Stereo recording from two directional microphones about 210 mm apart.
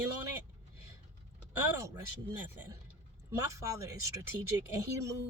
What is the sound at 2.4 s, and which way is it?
A woman's voice, 10° right (ahead or behind).